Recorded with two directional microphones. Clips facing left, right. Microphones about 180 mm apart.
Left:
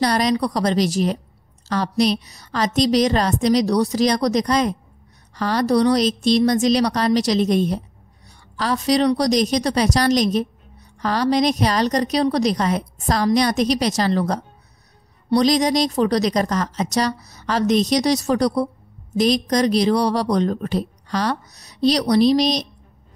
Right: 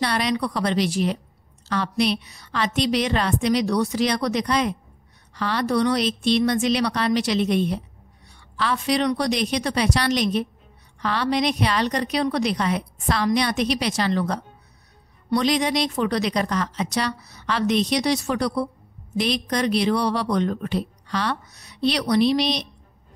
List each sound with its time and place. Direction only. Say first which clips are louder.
0.0 s speech: left 5 dB; 40° left (ahead or behind)